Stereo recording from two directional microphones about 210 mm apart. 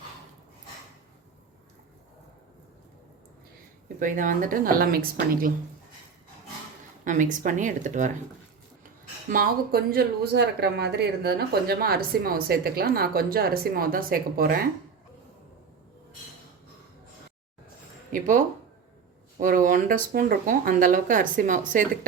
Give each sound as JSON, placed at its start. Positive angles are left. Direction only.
{"t": 3.8, "sound": "speech", "side_deg": -40}
{"t": 7.0, "sound": "speech", "side_deg": -40}
{"t": 9.3, "sound": "speech", "side_deg": -45}
{"t": 18.1, "sound": "speech", "side_deg": -40}